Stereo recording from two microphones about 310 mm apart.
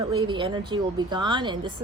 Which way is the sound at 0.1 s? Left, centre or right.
Centre.